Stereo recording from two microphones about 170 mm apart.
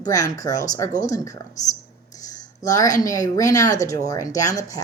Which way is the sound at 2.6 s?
20° left (ahead or behind).